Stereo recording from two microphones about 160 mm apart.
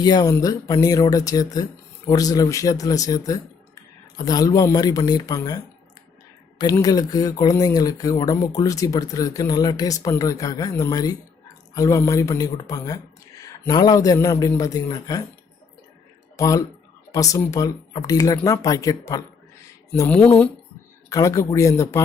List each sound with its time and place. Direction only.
0.0 s speech: 25° left (ahead or behind)
6.7 s speech: 25° left (ahead or behind)
16.4 s speech: 20° left (ahead or behind)
20.1 s speech: 10° left (ahead or behind)
21.1 s speech: 20° left (ahead or behind)